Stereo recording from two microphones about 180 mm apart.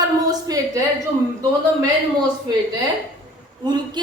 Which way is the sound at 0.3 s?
20° right (ahead or behind).